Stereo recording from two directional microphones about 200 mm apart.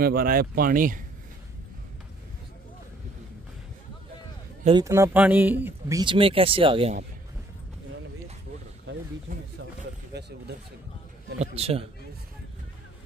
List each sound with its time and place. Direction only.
0.0 s speech: 45° right (ahead or behind)
4.8 s speech: 15° right (ahead or behind)
11.3 s a man's voice: 30° right (ahead or behind)